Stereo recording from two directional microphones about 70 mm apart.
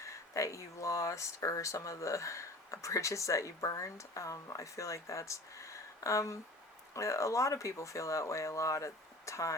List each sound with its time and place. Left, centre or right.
0.0 s speech: left